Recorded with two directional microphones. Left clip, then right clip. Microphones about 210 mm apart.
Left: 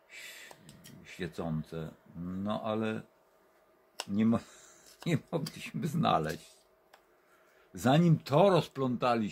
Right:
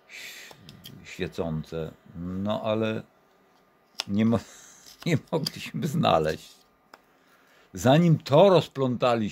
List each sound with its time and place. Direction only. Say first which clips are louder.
0.1 s gasp: right 6 dB; 35° right (ahead or behind)
0.8 s speech: right 7 dB; 35° right (ahead or behind)
4.1 s speech: right 5 dB; 40° right (ahead or behind)